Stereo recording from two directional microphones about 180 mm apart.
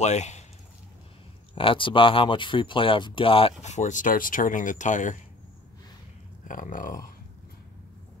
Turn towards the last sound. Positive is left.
turn(degrees=45)  # may be behind; listen again after turning